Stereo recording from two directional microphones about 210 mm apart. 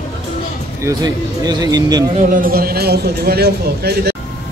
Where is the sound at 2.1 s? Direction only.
40° right (ahead or behind).